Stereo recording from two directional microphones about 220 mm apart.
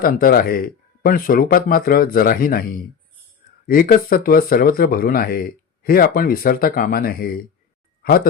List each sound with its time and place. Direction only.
0.0 s speech: 40° left (ahead or behind)